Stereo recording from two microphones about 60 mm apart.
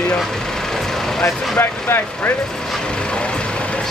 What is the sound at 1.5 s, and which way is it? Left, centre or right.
Speech, left.